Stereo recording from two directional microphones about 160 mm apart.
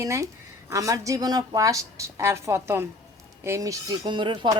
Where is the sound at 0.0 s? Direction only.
20° right (ahead or behind).